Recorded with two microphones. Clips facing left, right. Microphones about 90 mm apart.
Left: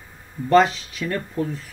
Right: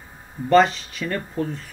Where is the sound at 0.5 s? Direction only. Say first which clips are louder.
Even; centre (ahead or behind).